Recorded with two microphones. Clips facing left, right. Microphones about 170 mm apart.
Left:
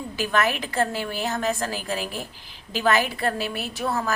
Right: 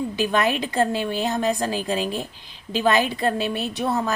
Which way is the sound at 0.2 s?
15° right (ahead or behind).